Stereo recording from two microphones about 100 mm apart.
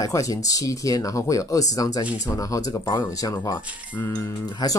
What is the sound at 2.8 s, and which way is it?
Speech, 50° left (ahead or behind).